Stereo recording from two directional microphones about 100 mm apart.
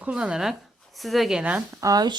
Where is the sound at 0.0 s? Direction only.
10° right (ahead or behind).